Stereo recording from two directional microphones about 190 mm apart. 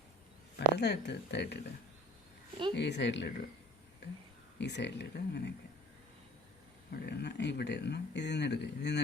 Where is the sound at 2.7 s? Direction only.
65° left (ahead or behind).